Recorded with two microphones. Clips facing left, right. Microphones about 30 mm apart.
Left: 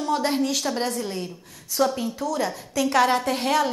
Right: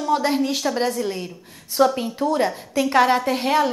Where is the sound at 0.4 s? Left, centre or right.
Right.